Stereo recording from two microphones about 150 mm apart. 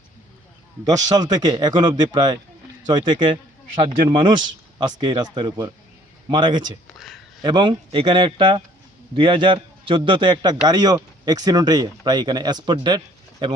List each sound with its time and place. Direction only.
0.9 s speech: 25° right (ahead or behind)